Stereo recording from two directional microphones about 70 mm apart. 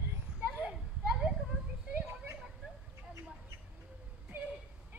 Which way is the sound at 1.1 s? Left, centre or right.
Centre.